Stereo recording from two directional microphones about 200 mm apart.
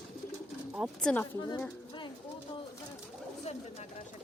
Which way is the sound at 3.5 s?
30° left (ahead or behind).